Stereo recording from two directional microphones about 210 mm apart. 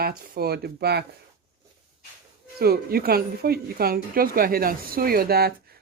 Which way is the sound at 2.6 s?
45° right (ahead or behind).